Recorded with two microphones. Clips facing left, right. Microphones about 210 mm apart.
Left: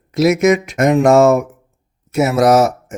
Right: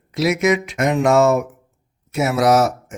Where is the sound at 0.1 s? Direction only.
45° left (ahead or behind).